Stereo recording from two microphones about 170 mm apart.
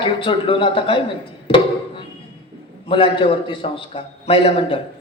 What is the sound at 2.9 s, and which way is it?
Speech, 30° left (ahead or behind).